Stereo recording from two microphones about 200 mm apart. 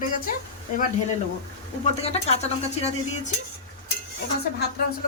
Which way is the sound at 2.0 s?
30° left (ahead or behind).